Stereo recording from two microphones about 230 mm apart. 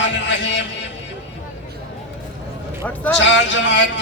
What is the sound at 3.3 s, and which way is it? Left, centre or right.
Speech, left.